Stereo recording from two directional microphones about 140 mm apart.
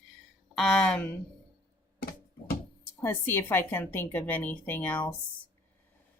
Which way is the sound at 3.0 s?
15° left (ahead or behind).